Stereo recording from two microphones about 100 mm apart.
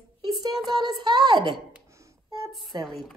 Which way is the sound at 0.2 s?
40° right (ahead or behind).